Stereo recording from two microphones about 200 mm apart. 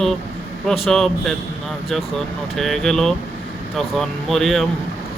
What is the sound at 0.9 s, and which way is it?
Speech, centre (ahead or behind).